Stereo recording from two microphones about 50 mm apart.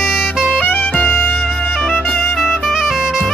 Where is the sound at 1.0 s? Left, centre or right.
Left.